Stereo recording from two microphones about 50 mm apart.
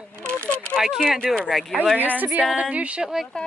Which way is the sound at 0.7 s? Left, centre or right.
Centre.